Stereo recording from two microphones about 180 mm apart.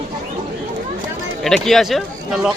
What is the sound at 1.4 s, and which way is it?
Speech, centre (ahead or behind).